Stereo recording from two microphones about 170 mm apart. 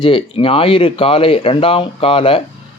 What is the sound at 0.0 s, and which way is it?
Speech, 35° left (ahead or behind).